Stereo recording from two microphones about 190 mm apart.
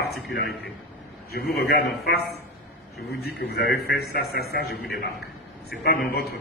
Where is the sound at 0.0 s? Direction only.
60° left (ahead or behind).